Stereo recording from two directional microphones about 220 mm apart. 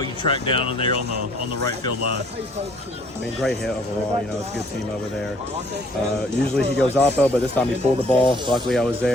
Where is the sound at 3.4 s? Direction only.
Centre (ahead or behind).